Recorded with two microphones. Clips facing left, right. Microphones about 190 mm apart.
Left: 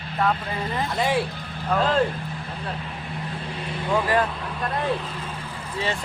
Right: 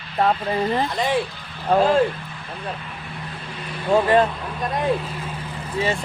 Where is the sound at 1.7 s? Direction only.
10° right (ahead or behind).